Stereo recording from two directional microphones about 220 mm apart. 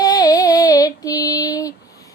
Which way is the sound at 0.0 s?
15° left (ahead or behind).